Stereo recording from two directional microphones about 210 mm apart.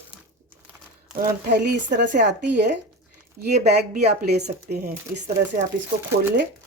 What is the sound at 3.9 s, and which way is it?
Speech, 35° right (ahead or behind).